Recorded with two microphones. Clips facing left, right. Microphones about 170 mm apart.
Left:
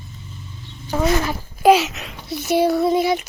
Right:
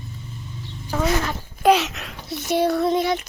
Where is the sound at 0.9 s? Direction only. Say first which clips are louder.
Left 3 dB; 10° left (ahead or behind).